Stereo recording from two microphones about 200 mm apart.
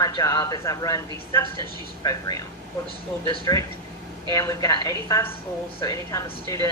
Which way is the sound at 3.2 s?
20° left (ahead or behind).